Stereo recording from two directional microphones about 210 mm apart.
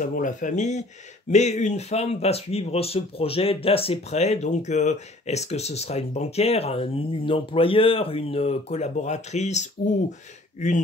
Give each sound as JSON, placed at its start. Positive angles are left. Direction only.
{"t": 0.0, "sound": "speech", "side_deg": 35}